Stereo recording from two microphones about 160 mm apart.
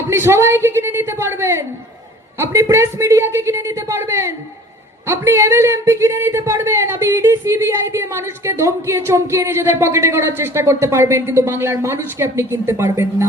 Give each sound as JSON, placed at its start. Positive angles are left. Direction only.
{"t": 0.1, "sound": "speech", "side_deg": -15}